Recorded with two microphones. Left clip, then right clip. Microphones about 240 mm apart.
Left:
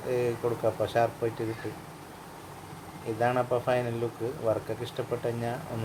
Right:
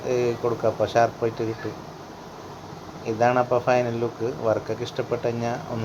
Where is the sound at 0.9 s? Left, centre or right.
Centre.